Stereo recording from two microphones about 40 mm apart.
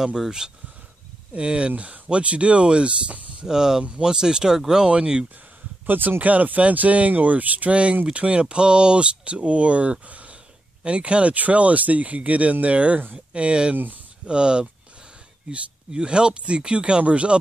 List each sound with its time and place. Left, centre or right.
0.0 s speech: centre
1.3 s speech: right
3.4 s speech: centre
5.9 s speech: right
7.7 s speech: right